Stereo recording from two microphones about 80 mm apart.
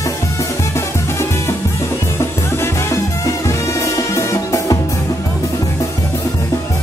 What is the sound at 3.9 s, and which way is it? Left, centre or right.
Music, left.